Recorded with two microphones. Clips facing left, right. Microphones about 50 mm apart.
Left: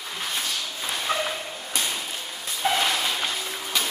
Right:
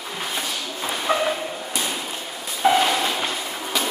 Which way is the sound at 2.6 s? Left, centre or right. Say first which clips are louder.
Right 6 dB; centre.